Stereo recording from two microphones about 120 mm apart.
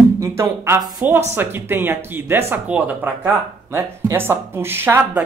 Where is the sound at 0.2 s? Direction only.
20° right (ahead or behind).